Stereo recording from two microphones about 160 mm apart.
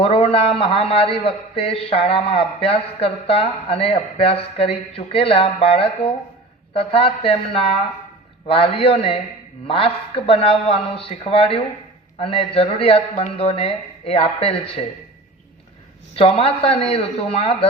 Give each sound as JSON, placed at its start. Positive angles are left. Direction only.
{"t": 0.0, "sound": "a man's voice", "side_deg": 35}
{"t": 16.1, "sound": "a man's voice", "side_deg": 35}